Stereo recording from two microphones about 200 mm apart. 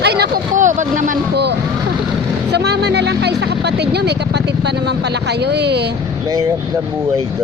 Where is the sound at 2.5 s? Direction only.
55° right (ahead or behind).